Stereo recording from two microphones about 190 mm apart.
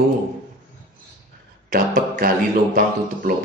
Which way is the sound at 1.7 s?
50° right (ahead or behind).